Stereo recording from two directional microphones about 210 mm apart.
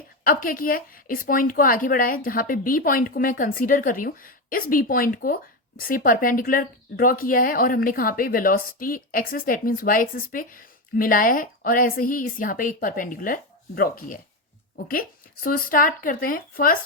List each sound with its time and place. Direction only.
0.3 s a woman's voice: 40° left (ahead or behind)
15.4 s speech: 45° left (ahead or behind)